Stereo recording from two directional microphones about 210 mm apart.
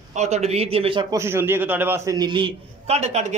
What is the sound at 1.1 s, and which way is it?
A man's voice, 10° right (ahead or behind).